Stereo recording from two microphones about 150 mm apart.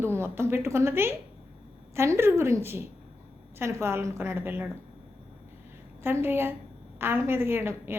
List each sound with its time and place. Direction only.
0.0 s a woman's voice: 15° right (ahead or behind)
6.0 s a woman's voice: 15° right (ahead or behind)